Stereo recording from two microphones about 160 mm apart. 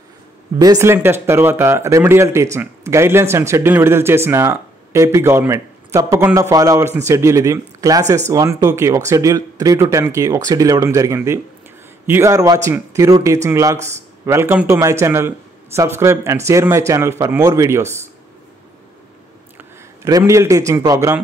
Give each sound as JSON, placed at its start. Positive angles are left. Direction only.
{"t": 0.6, "sound": "speech", "side_deg": -20}
{"t": 19.5, "sound": "a man's voice", "side_deg": -20}